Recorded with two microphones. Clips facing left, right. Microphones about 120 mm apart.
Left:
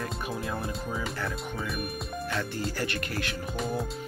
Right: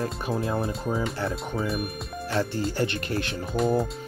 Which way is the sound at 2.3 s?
30° right (ahead or behind).